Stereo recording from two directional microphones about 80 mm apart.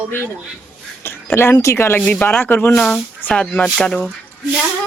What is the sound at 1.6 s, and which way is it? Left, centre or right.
Speech, left.